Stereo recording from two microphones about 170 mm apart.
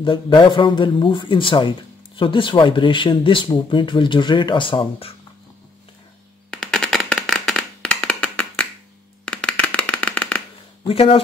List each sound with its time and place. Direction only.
0.0 s speech: 30° left (ahead or behind)
6.5 s a sound: 5° left (ahead or behind)
10.9 s speech: 35° left (ahead or behind)